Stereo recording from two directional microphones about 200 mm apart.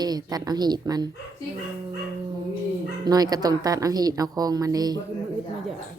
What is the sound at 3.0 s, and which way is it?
A woman's voice, 20° right (ahead or behind).